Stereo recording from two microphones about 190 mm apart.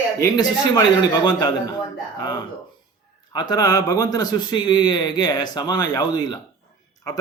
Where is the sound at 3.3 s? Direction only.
20° left (ahead or behind).